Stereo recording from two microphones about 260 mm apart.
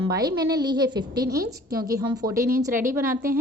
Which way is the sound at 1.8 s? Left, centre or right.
Centre.